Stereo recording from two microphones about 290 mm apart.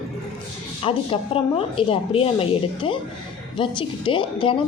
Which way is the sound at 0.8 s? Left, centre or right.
Centre.